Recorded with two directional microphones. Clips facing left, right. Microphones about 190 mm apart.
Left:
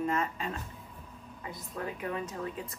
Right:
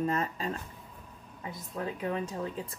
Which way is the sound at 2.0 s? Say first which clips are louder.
Right 4 dB; 30° right (ahead or behind).